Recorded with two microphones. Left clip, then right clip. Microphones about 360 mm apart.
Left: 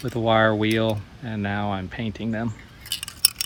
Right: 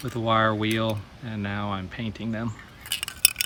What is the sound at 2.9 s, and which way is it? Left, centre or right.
Scissors, right.